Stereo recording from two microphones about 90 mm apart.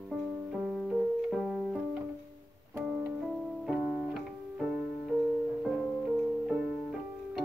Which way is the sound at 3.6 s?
5° right (ahead or behind).